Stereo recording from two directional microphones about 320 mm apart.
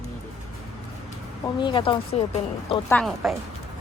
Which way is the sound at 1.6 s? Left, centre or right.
Centre.